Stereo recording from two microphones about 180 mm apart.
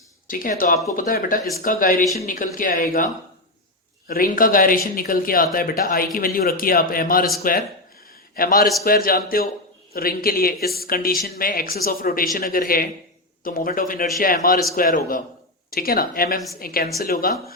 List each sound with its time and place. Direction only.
0.3 s speech: 50° left (ahead or behind)
4.1 s speech: 50° left (ahead or behind)
8.4 s a man's voice: 55° left (ahead or behind)